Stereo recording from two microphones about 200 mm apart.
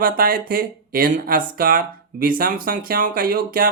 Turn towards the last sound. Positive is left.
turn(degrees=-45)  # may be behind; listen again after turning